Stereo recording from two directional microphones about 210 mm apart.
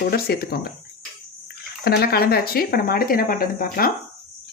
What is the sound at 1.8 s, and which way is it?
Speech, 50° left (ahead or behind).